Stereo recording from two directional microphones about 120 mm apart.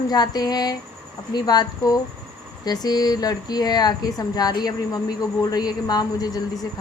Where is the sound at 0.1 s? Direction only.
35° left (ahead or behind).